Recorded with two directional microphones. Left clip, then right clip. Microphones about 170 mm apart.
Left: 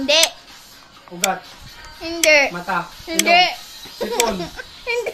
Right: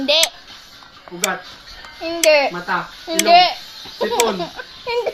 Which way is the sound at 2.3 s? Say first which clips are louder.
Even; 15° left (ahead or behind).